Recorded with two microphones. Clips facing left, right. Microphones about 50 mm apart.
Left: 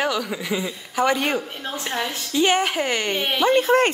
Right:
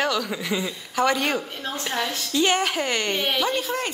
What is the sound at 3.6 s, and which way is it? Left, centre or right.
Speech, left.